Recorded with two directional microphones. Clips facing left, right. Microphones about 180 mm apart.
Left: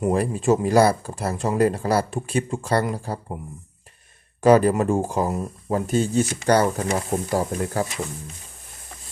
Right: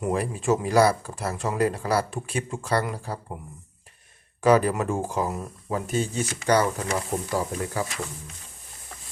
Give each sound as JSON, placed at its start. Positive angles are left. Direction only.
{"t": 0.1, "sound": "speech", "side_deg": 30}
{"t": 4.4, "sound": "speech", "side_deg": 30}